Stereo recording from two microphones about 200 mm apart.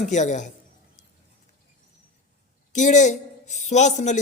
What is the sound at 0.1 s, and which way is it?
Speech, 35° left (ahead or behind).